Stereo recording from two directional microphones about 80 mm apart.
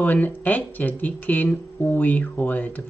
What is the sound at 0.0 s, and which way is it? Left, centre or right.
Speech, left.